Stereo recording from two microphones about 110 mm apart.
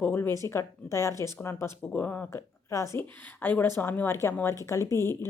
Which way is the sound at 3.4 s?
15° left (ahead or behind).